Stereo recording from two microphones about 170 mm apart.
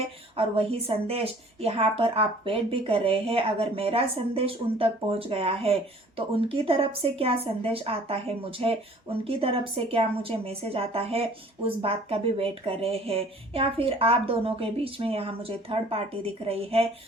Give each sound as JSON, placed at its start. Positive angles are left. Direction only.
{"t": 0.0, "sound": "speech", "side_deg": -35}